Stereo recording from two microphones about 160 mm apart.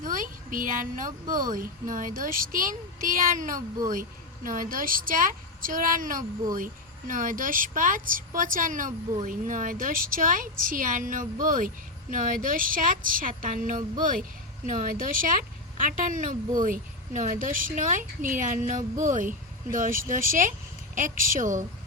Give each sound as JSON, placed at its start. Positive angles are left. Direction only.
{"t": 0.0, "sound": "speech", "side_deg": -55}